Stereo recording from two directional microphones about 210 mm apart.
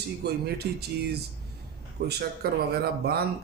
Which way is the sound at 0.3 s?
50° right (ahead or behind).